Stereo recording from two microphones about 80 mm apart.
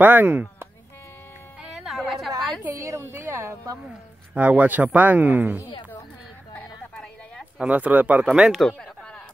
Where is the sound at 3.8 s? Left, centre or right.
Centre.